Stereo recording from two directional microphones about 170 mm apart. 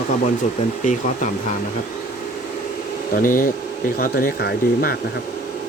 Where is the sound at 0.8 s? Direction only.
50° left (ahead or behind).